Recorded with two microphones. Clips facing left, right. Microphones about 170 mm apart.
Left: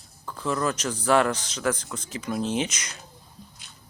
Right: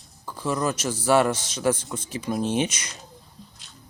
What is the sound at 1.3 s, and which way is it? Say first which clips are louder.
Speech: right 3 dB; 25° right (ahead or behind).